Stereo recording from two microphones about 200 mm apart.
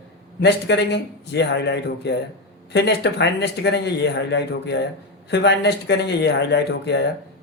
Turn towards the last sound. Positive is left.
turn(degrees=60)  # may be behind; listen again after turning